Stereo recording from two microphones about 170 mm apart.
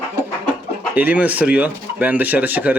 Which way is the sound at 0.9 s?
10° right (ahead or behind).